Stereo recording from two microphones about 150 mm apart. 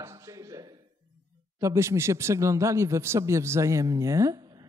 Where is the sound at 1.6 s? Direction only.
20° right (ahead or behind).